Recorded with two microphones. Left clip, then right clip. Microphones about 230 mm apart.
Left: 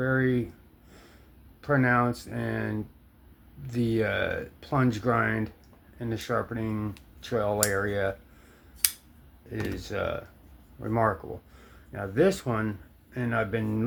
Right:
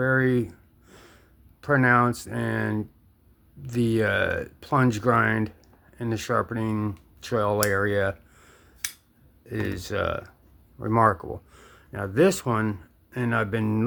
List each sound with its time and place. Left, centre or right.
0.0 s a sound: right
1.6 s speech: right
9.5 s speech: right